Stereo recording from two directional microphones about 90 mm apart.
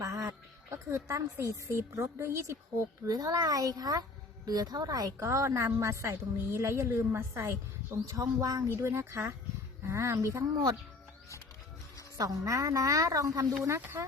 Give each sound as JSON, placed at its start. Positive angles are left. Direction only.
{"t": 0.0, "sound": "a sound", "side_deg": -35}
{"t": 1.6, "sound": "a woman's voice", "side_deg": -30}
{"t": 3.1, "sound": "a child's voice", "side_deg": -45}
{"t": 8.0, "sound": "a woman's voice", "side_deg": -40}
{"t": 8.7, "sound": "a woman's voice", "side_deg": -30}
{"t": 12.1, "sound": "a woman's voice", "side_deg": -40}